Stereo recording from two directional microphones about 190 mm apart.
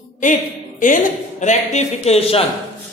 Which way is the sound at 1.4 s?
40° left (ahead or behind).